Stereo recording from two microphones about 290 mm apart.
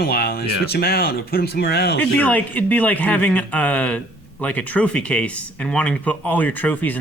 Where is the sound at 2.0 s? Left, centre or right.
Centre.